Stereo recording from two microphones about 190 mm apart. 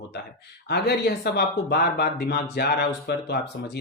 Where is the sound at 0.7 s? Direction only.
60° left (ahead or behind).